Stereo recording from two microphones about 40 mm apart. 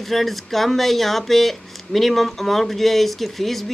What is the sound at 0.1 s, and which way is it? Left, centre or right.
Speech, centre.